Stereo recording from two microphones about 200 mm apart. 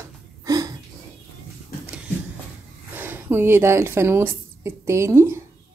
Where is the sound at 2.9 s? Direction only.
10° right (ahead or behind).